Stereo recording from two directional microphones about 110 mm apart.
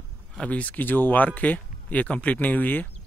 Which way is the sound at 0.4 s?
10° left (ahead or behind).